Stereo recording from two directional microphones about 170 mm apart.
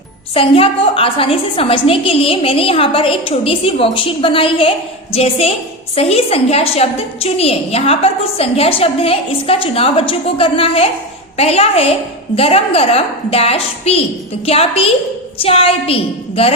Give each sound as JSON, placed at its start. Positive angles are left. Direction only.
{"t": 0.3, "sound": "a woman's voice", "side_deg": 35}